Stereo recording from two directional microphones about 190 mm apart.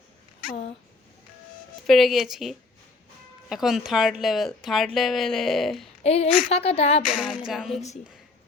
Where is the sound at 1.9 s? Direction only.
Centre (ahead or behind).